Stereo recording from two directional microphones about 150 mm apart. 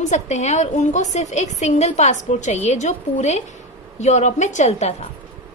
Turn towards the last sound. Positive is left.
turn(degrees=45)  # may be behind; listen again after turning